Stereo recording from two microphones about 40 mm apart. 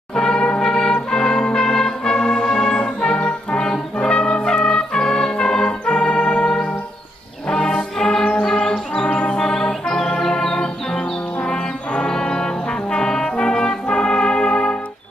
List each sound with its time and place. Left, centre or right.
0.1 s brass instrument: centre
1.1 s music: centre
3.6 s brass instrument: centre
4.1 s music: left
9.1 s music: left
9.4 s organ: centre
11.4 s brass instrument: left